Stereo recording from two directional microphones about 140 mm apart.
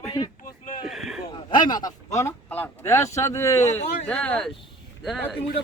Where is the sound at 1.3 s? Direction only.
35° left (ahead or behind).